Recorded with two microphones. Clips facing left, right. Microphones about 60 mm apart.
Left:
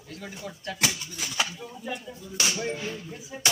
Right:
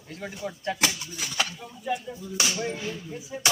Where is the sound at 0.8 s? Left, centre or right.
Centre.